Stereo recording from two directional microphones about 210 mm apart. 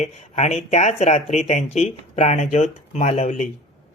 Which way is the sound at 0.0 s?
30° left (ahead or behind).